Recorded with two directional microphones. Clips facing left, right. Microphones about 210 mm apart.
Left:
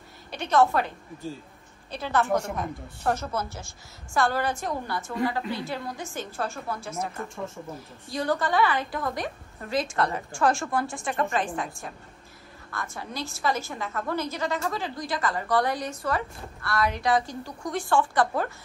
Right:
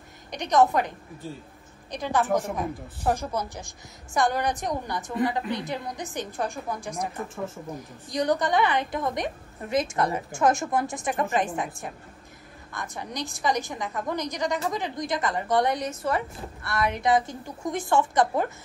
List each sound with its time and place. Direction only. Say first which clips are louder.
0.3 s a woman's voice: right 1 dB; 15° right (ahead or behind)